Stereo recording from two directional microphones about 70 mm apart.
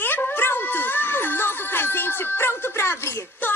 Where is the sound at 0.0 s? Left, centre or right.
Left.